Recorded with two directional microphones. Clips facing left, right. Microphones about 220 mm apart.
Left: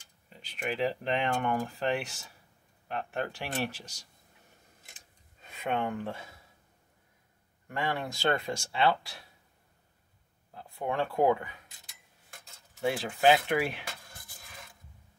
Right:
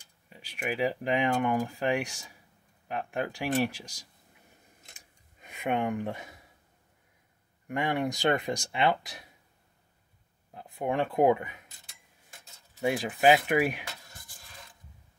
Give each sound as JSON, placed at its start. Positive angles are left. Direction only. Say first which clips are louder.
{"t": 0.3, "sound": "speech", "louder": "right 1 dB", "side_deg": -10}
{"t": 4.9, "sound": "scissors", "louder": "right 1 dB", "side_deg": -15}
{"t": 7.6, "sound": "speech", "louder": "right 4 dB", "side_deg": -15}
{"t": 10.5, "sound": "speech", "louder": "right 3 dB", "side_deg": -20}
{"t": 12.8, "sound": "speech", "louder": "right 2 dB", "side_deg": -15}